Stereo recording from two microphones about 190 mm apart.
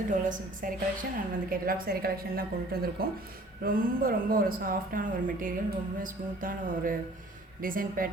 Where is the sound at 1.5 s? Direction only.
50° right (ahead or behind).